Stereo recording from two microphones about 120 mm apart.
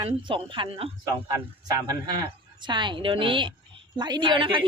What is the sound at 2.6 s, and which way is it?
A woman's voice, 40° right (ahead or behind).